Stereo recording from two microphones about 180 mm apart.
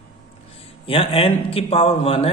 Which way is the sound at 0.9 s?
30° left (ahead or behind).